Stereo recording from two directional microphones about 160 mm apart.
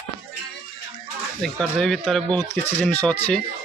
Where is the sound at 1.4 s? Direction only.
5° left (ahead or behind).